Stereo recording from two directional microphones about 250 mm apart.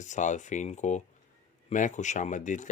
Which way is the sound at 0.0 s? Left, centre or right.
Left.